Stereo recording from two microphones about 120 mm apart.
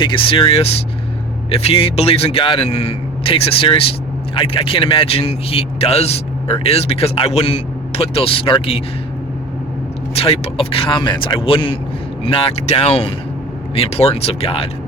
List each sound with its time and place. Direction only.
0.0 s a man's voice: 45° left (ahead or behind)
10.2 s a man's voice: 55° left (ahead or behind)